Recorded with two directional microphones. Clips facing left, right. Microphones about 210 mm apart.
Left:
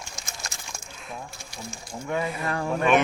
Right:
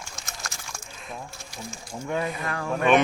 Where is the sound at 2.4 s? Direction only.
30° left (ahead or behind).